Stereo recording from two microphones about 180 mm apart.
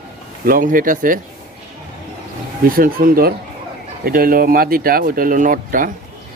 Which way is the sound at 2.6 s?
55° right (ahead or behind).